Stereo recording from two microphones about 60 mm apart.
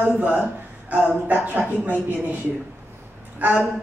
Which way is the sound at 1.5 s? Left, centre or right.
Right.